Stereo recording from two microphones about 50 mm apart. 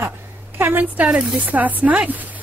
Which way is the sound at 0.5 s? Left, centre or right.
Right.